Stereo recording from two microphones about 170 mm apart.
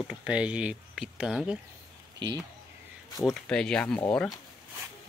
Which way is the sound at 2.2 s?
25° right (ahead or behind).